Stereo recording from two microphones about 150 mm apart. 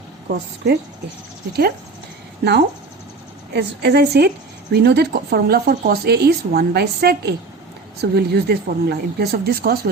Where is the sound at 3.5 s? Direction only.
90° right.